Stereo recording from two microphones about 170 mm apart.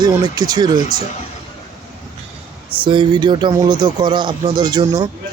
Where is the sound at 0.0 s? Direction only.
25° right (ahead or behind).